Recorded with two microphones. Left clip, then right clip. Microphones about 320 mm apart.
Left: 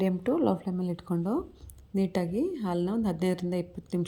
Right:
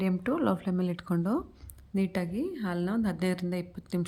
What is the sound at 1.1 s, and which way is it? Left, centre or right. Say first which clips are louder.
Speech: left 1 dB; centre.